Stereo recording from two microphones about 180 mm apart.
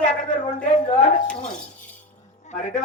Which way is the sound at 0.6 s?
35° left (ahead or behind).